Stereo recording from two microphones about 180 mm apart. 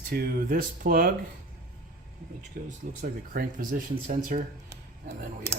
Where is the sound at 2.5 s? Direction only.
55° right (ahead or behind).